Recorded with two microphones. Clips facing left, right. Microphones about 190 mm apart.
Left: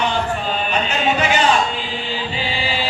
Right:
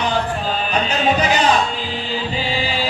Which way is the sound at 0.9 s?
35° right (ahead or behind).